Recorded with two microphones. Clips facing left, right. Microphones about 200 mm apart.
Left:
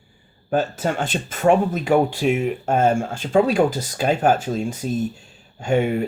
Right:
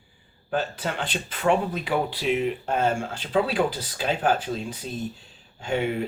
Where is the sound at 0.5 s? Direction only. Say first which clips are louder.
Left 6 dB; 45° left (ahead or behind).